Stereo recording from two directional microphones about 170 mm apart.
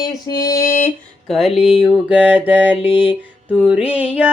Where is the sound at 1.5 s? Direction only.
35° left (ahead or behind).